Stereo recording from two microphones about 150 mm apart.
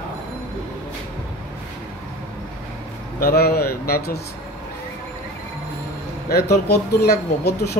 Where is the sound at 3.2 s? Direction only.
90° left.